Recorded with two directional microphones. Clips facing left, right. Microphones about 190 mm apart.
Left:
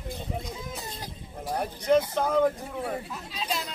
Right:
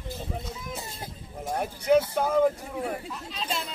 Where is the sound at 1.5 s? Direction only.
5° right (ahead or behind).